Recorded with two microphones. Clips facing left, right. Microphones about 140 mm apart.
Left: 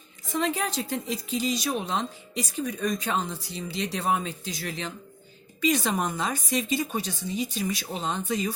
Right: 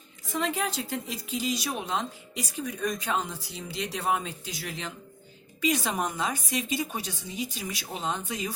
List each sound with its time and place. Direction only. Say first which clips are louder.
0.3 s a woman's voice: left 2 dB; 5° right (ahead or behind)